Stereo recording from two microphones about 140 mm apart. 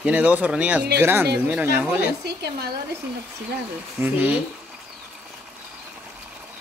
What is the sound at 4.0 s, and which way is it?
Speech, 10° right (ahead or behind).